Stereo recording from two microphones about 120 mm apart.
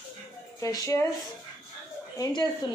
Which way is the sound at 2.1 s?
35° left (ahead or behind).